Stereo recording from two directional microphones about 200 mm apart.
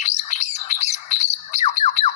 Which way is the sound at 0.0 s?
35° left (ahead or behind).